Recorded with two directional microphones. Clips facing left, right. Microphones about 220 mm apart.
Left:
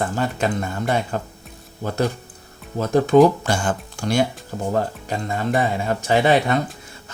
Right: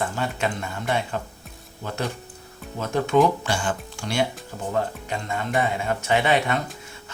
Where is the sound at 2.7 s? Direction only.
35° left (ahead or behind).